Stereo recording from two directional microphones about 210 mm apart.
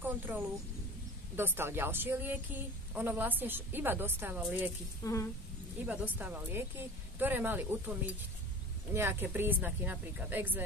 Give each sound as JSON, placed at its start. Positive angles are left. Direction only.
{"t": 0.0, "sound": "a woman's voice", "side_deg": -10}
{"t": 5.0, "sound": "a woman's voice", "side_deg": 15}
{"t": 5.9, "sound": "a woman's voice", "side_deg": -10}
{"t": 8.9, "sound": "a woman's voice", "side_deg": -10}